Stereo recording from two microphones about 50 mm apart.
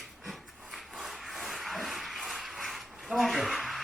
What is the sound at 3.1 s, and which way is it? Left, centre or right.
Speech, centre.